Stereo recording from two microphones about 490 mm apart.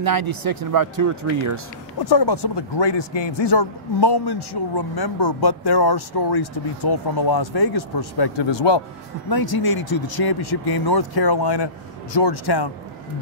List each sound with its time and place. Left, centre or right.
0.0 s speech: right
2.0 s a man's voice: left
9.3 s a man's voice: left